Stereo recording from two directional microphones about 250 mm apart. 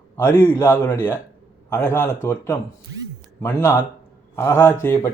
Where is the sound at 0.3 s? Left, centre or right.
Centre.